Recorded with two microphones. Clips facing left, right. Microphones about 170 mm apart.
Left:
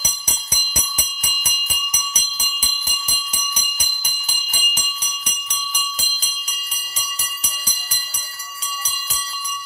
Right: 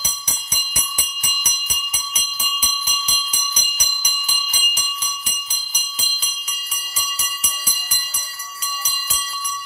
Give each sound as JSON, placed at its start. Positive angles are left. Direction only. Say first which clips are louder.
{"t": 1.9, "sound": "jingle bell", "louder": "left 1 dB", "side_deg": 40}